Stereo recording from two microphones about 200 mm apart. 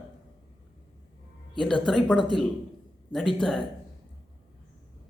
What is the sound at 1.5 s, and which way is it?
Speech, 5° left (ahead or behind).